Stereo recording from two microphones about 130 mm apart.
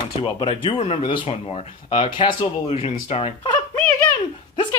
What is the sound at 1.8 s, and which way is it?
Speech, 40° left (ahead or behind).